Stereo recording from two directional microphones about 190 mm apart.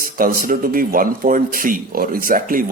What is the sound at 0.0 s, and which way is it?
Speech, 45° right (ahead or behind).